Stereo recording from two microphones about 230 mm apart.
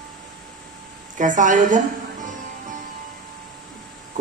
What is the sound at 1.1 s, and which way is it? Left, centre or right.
A woman's voice, right.